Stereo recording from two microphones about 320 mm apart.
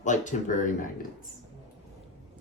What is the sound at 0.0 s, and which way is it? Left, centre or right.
Speech, left.